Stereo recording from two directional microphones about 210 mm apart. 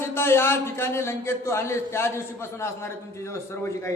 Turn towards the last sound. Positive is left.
turn(degrees=15)  # may be behind; listen again after turning